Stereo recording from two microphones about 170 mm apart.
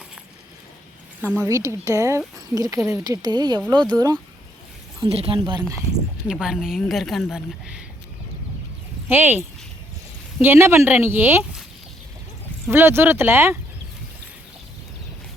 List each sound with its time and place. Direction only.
1.2 s speech: 10° right (ahead or behind)
5.0 s speech: 35° right (ahead or behind)
6.2 s speech: 5° right (ahead or behind)
9.0 s speech: 10° right (ahead or behind)
10.4 s speech: 15° right (ahead or behind)
12.7 s speech: 15° right (ahead or behind)